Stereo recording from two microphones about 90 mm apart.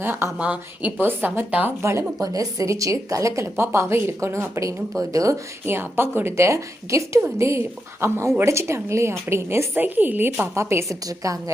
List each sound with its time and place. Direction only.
0.0 s a woman's voice: 25° right (ahead or behind)
0.3 s a woman's voice: 15° right (ahead or behind)
1.8 s a woman's voice: 30° right (ahead or behind)